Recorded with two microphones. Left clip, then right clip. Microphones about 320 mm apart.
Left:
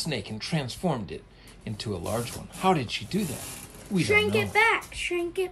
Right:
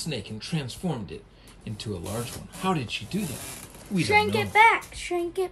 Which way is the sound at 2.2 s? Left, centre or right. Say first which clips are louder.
Left 5 dB; centre.